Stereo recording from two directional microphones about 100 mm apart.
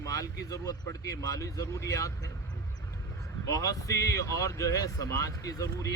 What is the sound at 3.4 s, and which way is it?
Speech, 30° left (ahead or behind).